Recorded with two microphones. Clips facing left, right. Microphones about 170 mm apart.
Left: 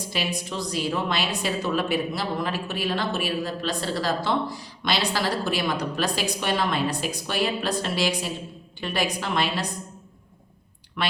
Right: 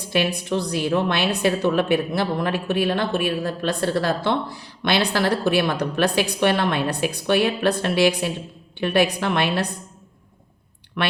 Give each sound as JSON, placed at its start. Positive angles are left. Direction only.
{"t": 0.1, "sound": "a woman's voice", "side_deg": -60}
{"t": 11.0, "sound": "a woman's voice", "side_deg": -60}